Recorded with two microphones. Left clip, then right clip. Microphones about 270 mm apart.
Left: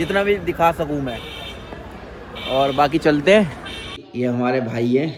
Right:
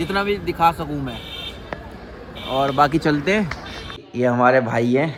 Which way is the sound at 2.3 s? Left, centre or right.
Right.